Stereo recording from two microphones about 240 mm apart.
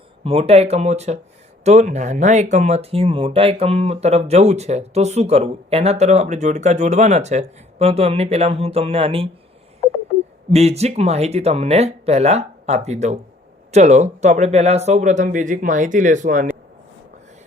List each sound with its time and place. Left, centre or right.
0.3 s speech: right
10.5 s speech: right